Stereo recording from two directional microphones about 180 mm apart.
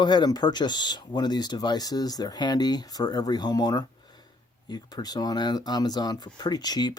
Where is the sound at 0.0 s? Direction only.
25° left (ahead or behind).